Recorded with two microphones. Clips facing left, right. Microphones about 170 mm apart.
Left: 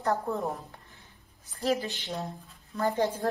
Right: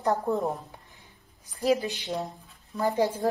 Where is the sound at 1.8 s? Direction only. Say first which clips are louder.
Right 3 dB; 20° right (ahead or behind).